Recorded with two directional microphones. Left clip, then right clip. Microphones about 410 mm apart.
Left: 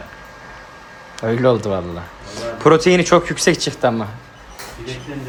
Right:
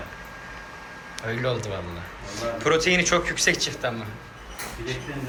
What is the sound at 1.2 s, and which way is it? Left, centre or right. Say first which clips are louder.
Speech: left 11 dB; centre.